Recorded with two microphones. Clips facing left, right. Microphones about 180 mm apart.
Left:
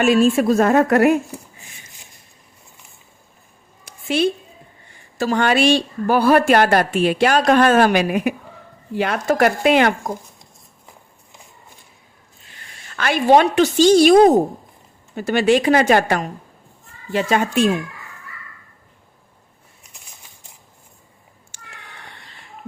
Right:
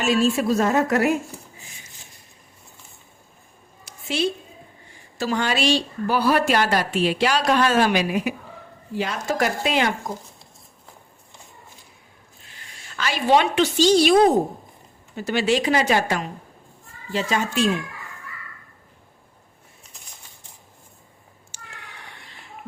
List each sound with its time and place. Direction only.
0.0 s a woman's voice: 55° left (ahead or behind)
3.8 s a sound: 55° left (ahead or behind)
5.1 s a woman's voice: 50° left (ahead or behind)
13.0 s a woman's voice: 55° left (ahead or behind)
21.5 s cat: 55° left (ahead or behind)